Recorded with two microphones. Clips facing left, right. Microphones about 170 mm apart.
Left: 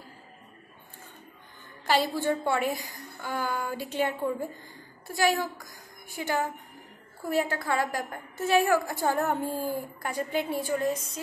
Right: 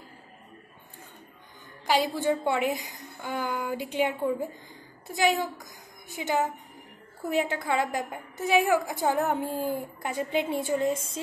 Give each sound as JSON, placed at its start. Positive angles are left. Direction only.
{"t": 1.9, "sound": "a woman's voice", "side_deg": -15}